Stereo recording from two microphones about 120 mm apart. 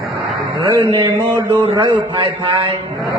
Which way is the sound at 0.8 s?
40° right (ahead or behind).